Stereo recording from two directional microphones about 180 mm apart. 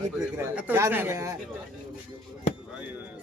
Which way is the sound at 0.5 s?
10° right (ahead or behind).